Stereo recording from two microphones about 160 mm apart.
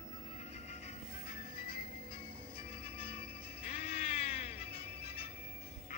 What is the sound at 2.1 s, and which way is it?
Music, 35° left (ahead or behind).